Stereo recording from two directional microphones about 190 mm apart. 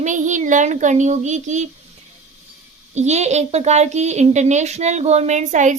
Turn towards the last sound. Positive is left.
turn(degrees=-40)  # may be behind; listen again after turning